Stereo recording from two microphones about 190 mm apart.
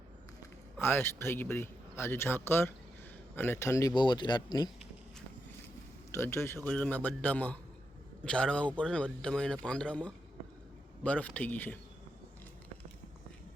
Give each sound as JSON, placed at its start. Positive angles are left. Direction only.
{"t": 0.8, "sound": "a man's voice", "side_deg": 10}
{"t": 6.1, "sound": "speech", "side_deg": 15}